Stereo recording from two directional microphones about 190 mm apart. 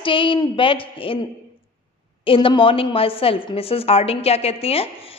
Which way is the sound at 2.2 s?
30° left (ahead or behind).